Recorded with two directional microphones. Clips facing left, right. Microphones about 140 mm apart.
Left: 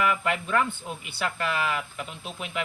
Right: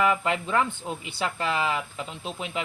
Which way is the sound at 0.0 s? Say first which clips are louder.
Right 2 dB; 25° right (ahead or behind).